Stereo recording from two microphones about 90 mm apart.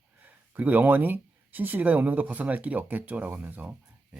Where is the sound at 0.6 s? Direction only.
20° right (ahead or behind).